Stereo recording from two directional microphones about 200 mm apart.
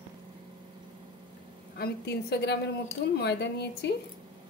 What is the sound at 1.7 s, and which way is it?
A woman's voice, 55° left (ahead or behind).